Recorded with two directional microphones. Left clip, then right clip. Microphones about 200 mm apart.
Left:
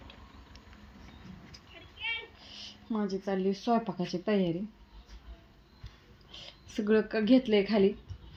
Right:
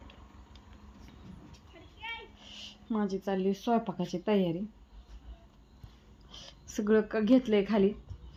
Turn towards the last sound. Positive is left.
turn(degrees=0)  # may be behind; listen again after turning